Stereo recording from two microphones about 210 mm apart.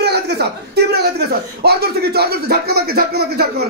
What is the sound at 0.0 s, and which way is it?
A man's voice, 50° right (ahead or behind).